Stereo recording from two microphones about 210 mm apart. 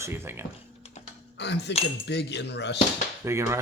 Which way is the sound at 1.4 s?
55° left (ahead or behind).